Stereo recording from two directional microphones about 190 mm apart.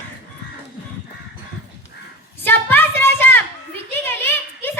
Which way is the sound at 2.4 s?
10° left (ahead or behind).